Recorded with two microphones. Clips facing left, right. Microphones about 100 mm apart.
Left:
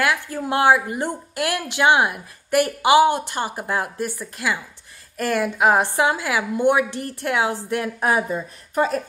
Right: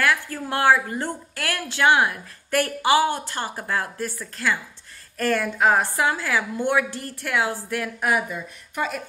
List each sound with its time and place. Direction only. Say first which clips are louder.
0.0 s a woman's voice: left 1 dB; 20° left (ahead or behind); by 9.0 s 35° left (ahead or behind)